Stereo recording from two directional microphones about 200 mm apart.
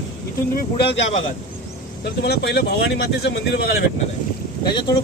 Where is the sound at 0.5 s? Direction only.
55° left (ahead or behind).